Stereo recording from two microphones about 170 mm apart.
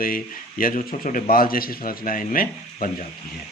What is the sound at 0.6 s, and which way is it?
A man's voice, 55° left (ahead or behind).